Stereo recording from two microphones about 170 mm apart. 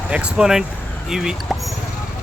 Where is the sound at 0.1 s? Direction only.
5° right (ahead or behind).